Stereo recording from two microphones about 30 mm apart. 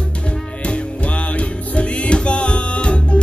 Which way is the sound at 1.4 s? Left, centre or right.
Left.